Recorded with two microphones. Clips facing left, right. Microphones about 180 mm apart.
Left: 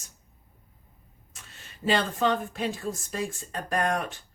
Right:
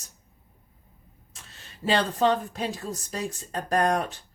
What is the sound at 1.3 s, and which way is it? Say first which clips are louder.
Speech: right 1 dB; 35° right (ahead or behind).